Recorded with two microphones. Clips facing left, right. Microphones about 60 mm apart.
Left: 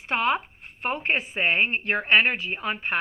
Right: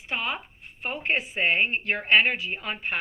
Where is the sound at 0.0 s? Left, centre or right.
Left.